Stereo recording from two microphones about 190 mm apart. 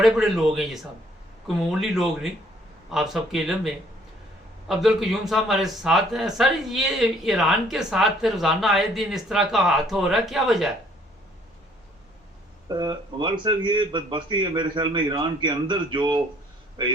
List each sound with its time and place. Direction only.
0.0 s a man's voice: centre (ahead or behind)
1.8 s a man's voice: centre (ahead or behind)
4.7 s a man's voice: centre (ahead or behind)
12.6 s a man's voice: 20° right (ahead or behind)